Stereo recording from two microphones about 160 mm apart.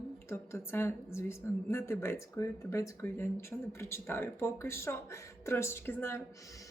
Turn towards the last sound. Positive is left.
turn(degrees=15)  # may be behind; listen again after turning